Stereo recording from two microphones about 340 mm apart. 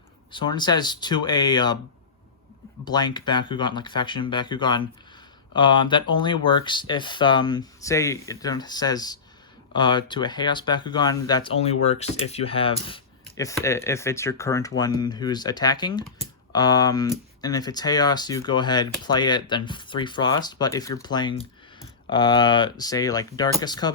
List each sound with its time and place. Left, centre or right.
0.3 s speech: centre
2.8 s speech: centre